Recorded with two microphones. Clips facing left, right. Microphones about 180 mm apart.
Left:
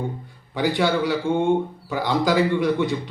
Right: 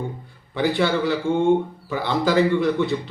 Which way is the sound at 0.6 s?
15° left (ahead or behind).